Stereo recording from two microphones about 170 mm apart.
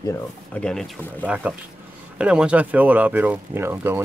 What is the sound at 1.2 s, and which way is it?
Speech, 10° right (ahead or behind).